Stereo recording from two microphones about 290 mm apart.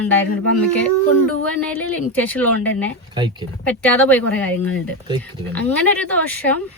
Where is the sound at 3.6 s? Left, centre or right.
Centre.